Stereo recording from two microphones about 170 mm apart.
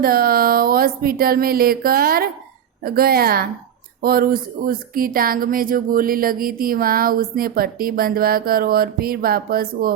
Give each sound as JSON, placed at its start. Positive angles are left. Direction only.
{"t": 0.0, "sound": "speech", "side_deg": -60}